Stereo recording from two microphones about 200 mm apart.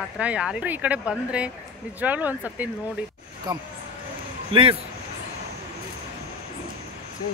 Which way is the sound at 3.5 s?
20° right (ahead or behind).